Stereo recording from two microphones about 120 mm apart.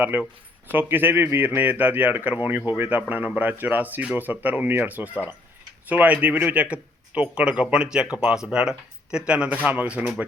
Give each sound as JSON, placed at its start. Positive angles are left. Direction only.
{"t": 0.0, "sound": "speech", "side_deg": -15}